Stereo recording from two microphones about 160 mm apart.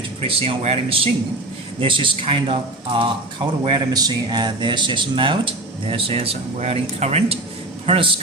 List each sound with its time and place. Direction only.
0.2 s speech: 35° right (ahead or behind)